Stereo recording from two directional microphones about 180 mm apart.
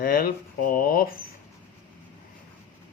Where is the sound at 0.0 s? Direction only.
55° left (ahead or behind).